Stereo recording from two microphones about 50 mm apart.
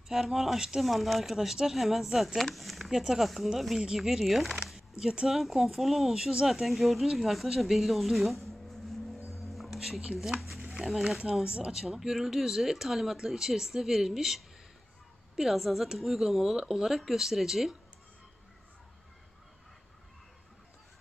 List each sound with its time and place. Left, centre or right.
0.1 s speech: centre
4.6 s a sound: centre
5.2 s speech: centre
9.3 s music: centre
10.7 s speech: centre
11.1 s speech: right; by 17.7 s centre